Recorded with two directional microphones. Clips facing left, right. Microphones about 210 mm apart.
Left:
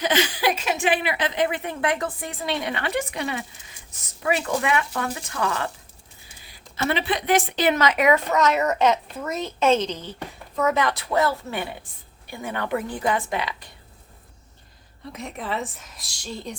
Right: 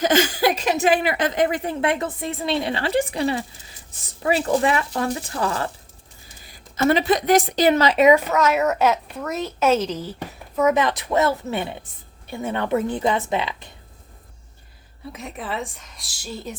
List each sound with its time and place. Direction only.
0.0 s a woman's voice: 45° right (ahead or behind)
6.4 s speech: 45° right (ahead or behind); by 8.1 s 30° right (ahead or behind)
8.1 s a woman's voice: 5° right (ahead or behind)
10.8 s a woman's voice: 20° right (ahead or behind)
15.1 s a woman's voice: centre (ahead or behind)